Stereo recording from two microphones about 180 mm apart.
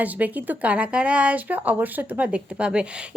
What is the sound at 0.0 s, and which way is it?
Speech, 10° right (ahead or behind).